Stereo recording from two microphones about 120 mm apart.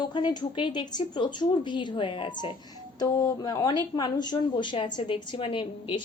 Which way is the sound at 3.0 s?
30° left (ahead or behind).